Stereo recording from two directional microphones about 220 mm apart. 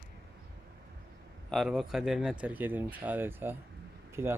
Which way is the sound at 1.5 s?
Centre (ahead or behind).